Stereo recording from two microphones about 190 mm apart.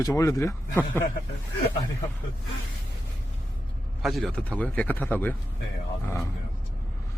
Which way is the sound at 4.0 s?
Centre (ahead or behind).